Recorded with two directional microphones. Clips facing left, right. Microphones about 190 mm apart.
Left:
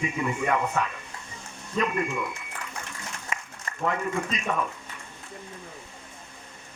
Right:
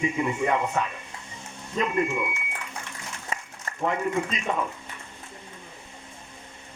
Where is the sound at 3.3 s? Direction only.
35° right (ahead or behind).